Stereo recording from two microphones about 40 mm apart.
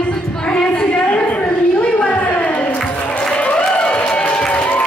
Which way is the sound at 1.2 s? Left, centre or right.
Left.